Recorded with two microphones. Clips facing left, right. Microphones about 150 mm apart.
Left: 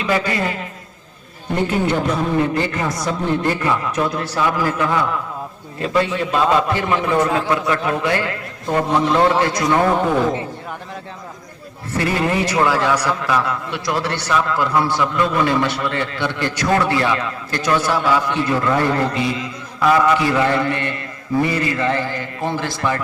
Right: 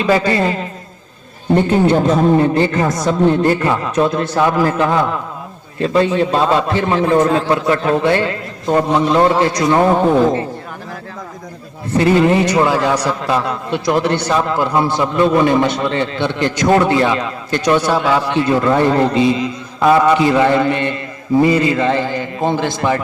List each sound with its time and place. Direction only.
0.0 s a man's voice: 30° right (ahead or behind)
1.7 s a man's voice: 30° right (ahead or behind)
11.9 s a man's voice: 20° right (ahead or behind)